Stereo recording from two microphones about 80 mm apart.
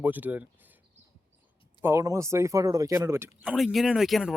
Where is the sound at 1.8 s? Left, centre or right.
Right.